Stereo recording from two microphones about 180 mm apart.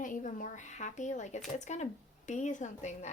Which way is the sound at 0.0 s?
45° left (ahead or behind).